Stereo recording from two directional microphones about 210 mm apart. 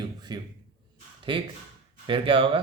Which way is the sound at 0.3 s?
20° right (ahead or behind).